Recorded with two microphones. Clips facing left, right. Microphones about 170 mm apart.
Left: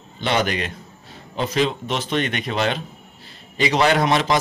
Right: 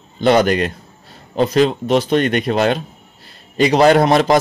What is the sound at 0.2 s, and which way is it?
A man's voice, 40° right (ahead or behind).